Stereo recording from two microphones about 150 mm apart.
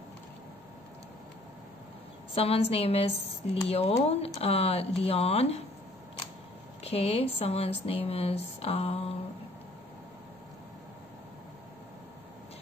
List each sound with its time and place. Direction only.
2.3 s speech: 40° left (ahead or behind)
6.8 s speech: 45° left (ahead or behind)